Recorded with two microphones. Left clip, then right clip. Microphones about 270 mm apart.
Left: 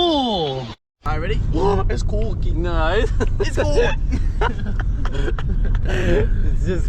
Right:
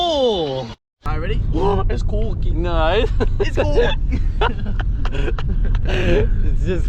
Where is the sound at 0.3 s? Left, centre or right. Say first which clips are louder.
Right 2 dB; left.